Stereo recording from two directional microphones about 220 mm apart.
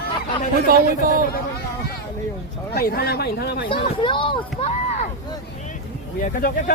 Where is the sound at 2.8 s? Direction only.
45° left (ahead or behind).